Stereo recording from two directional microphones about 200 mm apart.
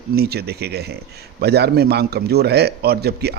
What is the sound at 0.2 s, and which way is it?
Speech, 55° right (ahead or behind).